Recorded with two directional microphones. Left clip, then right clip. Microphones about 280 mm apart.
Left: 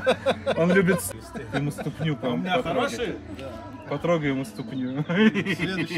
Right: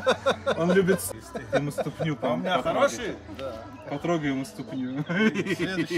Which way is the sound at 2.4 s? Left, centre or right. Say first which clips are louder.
Right 1 dB; centre.